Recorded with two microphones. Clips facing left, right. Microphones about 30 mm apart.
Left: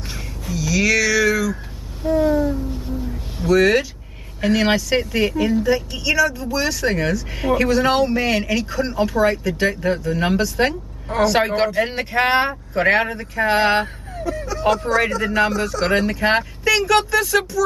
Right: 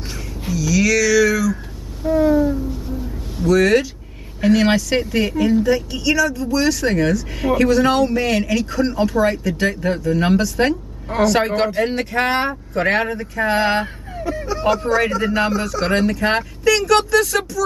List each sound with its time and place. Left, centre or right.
0.6 s a sound: centre
2.1 s a sound: centre
4.4 s a woman's voice: centre
11.2 s speech: centre
14.2 s speech: right
14.6 s speech: centre